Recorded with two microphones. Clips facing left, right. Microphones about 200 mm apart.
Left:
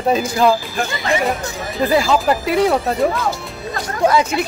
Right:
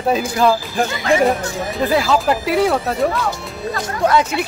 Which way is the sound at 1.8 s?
Centre (ahead or behind).